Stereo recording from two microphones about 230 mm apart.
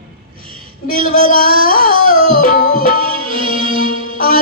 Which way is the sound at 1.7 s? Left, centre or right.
Left.